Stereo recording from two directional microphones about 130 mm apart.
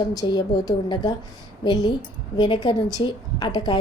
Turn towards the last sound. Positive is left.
turn(degrees=35)  # may be behind; listen again after turning